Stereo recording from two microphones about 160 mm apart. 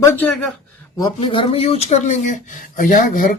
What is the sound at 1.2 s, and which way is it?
Speech, 35° left (ahead or behind).